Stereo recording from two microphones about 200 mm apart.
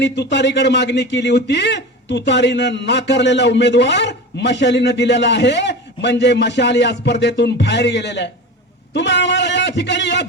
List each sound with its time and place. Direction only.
0.0 s speech: 60° left (ahead or behind)